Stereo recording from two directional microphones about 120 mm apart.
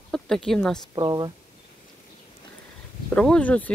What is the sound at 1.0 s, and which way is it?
Speech, 35° right (ahead or behind).